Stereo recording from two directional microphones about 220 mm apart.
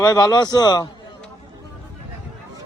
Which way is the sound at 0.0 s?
15° left (ahead or behind).